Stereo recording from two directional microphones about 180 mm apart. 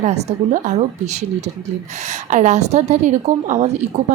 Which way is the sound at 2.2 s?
40° right (ahead or behind).